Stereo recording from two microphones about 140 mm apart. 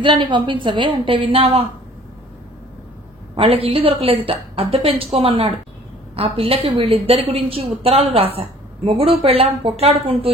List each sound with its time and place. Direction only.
0.0 s a woman's voice: 35° right (ahead or behind)
3.3 s a woman's voice: 45° right (ahead or behind)